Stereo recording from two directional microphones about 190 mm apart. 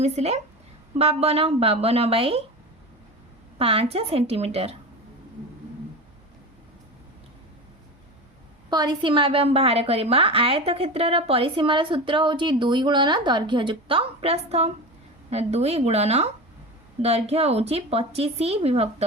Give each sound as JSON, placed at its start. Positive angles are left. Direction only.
{"t": 0.0, "sound": "a woman's voice", "side_deg": -35}
{"t": 3.6, "sound": "a woman's voice", "side_deg": -30}
{"t": 8.7, "sound": "a woman's voice", "side_deg": -20}